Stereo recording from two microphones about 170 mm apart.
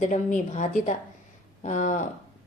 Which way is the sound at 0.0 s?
45° left (ahead or behind).